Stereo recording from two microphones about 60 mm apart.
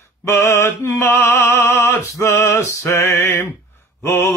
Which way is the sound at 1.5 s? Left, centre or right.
Left.